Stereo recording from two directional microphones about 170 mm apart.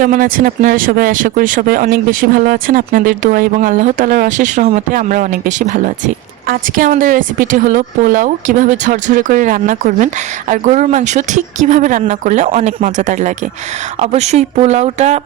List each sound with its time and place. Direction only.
0.0 s speech: 55° right (ahead or behind)